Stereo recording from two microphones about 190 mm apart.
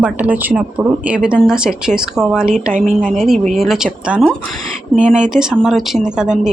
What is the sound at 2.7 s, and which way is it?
Speech, 40° right (ahead or behind).